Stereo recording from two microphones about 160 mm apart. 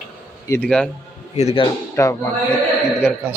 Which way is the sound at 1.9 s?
15° left (ahead or behind).